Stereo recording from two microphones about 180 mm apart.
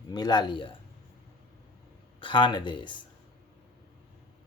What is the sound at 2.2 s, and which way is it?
Speech, 25° left (ahead or behind).